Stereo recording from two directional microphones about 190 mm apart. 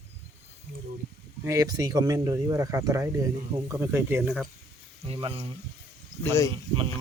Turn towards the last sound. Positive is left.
turn(degrees=-30)  # may be behind; listen again after turning